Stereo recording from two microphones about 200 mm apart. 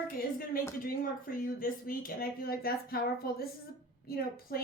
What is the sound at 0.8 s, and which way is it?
A woman's voice, 45° left (ahead or behind).